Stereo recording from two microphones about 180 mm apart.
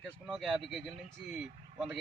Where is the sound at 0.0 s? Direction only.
Centre (ahead or behind).